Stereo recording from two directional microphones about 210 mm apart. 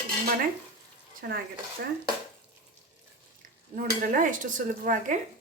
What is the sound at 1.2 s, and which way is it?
Speech, 45° right (ahead or behind).